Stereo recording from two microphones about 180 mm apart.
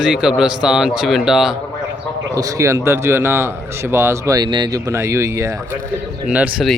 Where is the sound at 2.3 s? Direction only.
15° right (ahead or behind).